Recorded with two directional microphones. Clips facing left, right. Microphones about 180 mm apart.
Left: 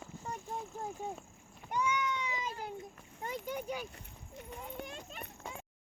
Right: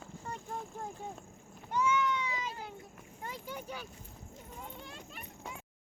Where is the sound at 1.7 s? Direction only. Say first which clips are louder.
Right 3 dB; 15° left (ahead or behind).